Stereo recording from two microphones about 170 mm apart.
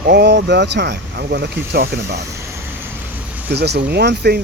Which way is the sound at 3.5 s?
75° right (ahead or behind).